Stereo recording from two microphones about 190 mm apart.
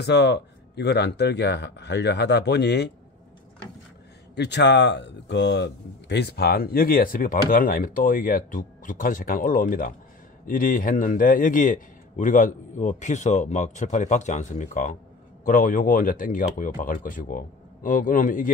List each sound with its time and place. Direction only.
0.0 s speech: 60° left (ahead or behind)
4.4 s speech: 65° left (ahead or behind); by 18.5 s 45° left (ahead or behind)